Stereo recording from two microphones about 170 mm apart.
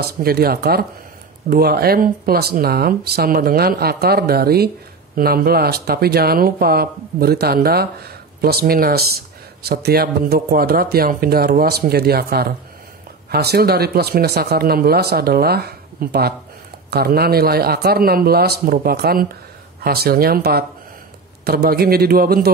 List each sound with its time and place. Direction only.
0.0 s speech: 65° right (ahead or behind)